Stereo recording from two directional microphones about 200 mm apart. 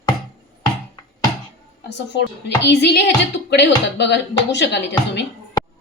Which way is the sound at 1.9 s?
60° left (ahead or behind).